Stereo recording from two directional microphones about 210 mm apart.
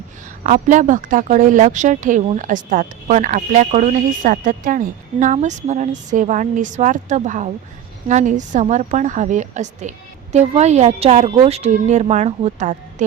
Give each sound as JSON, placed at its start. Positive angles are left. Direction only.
{"t": 0.4, "sound": "speech", "side_deg": -35}